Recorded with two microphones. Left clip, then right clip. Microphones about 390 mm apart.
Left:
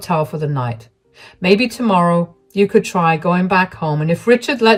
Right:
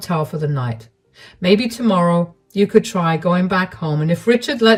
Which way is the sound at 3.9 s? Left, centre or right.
Left.